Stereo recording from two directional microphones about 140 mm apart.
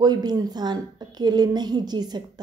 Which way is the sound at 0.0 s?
30° right (ahead or behind).